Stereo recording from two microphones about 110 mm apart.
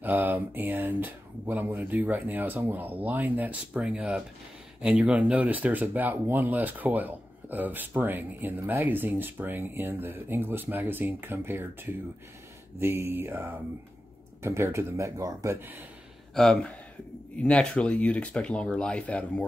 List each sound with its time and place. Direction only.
0.0 s speech: 15° right (ahead or behind)
16.3 s speech: 5° left (ahead or behind)